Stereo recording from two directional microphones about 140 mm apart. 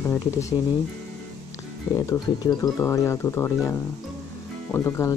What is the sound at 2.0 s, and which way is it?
Speech, 25° left (ahead or behind).